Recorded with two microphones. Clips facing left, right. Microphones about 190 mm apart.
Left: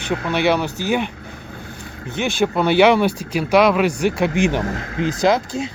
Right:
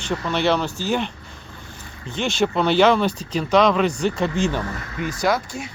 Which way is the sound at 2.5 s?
10° left (ahead or behind).